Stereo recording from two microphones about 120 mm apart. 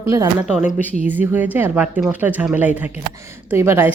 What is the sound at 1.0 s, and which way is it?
Speech, 15° right (ahead or behind).